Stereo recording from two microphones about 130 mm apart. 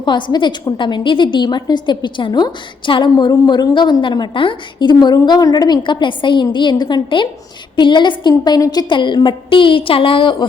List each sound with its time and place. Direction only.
0.0 s a woman's voice: 35° left (ahead or behind)